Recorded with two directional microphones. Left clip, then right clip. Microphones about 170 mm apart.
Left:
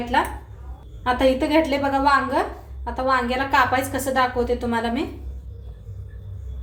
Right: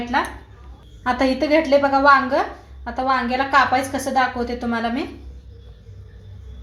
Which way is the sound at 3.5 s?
30° right (ahead or behind).